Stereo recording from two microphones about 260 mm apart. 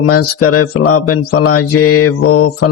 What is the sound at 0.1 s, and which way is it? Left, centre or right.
Mantra, left.